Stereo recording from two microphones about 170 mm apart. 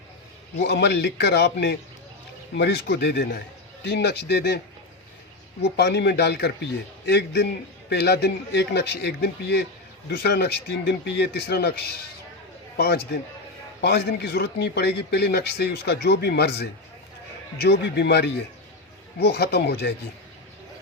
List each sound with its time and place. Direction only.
0.6 s a man's voice: 90° left
5.6 s a man's voice: 80° left
7.9 s a man's voice: 75° left (ahead or behind)